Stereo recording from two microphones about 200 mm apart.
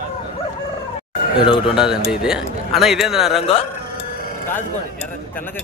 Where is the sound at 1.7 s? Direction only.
5° right (ahead or behind).